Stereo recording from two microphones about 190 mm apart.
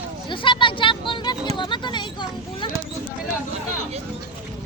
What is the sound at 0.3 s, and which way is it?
Speech, 25° left (ahead or behind).